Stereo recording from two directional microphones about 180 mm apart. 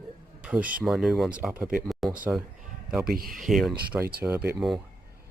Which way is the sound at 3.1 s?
55° right (ahead or behind).